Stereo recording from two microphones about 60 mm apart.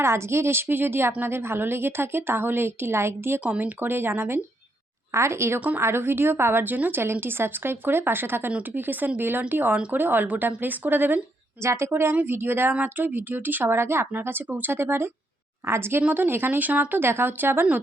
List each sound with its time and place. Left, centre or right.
0.0 s a woman's voice: right
5.1 s a woman's voice: right
5.5 s a woman's voice: right
5.8 s speech: right
6.7 s a woman's voice: right
7.0 s speech: right
11.6 s a woman's voice: right
17.0 s speech: right